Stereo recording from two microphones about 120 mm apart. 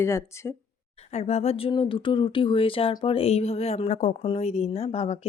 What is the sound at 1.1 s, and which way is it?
Speech, 65° left (ahead or behind).